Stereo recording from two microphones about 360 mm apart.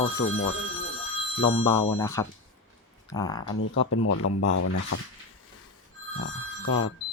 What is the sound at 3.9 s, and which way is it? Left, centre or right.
Speech, left.